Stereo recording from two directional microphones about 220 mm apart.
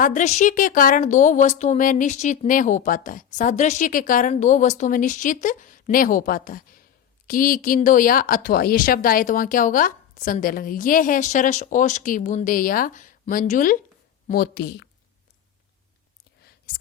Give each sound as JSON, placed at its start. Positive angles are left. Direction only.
{"t": 0.0, "sound": "a woman's voice", "side_deg": 35}